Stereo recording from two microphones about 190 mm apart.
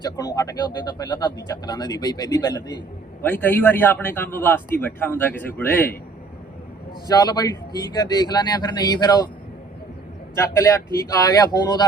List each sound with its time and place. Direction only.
0.0 s a man's voice: 20° left (ahead or behind)
7.1 s speech: 20° left (ahead or behind)
10.3 s a man's voice: 15° left (ahead or behind)